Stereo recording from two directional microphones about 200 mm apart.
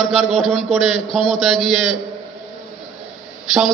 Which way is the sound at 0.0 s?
Centre (ahead or behind).